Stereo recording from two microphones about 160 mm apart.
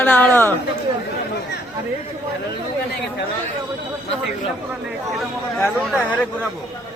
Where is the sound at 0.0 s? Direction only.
10° left (ahead or behind).